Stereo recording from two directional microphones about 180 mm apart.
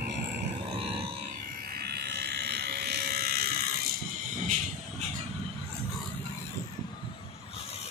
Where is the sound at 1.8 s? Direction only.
65° right (ahead or behind).